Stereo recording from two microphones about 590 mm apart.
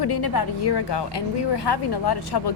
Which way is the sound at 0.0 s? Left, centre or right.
Left.